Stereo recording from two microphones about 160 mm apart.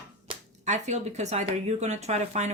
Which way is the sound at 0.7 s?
45° right (ahead or behind).